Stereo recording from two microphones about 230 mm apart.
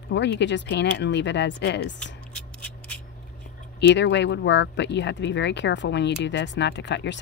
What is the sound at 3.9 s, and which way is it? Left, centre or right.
Speech, left.